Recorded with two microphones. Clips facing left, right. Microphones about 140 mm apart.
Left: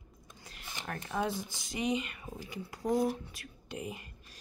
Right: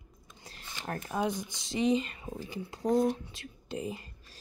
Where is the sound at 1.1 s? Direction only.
20° right (ahead or behind).